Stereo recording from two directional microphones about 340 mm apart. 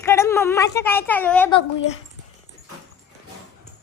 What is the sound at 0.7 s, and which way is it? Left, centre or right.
Speech, centre.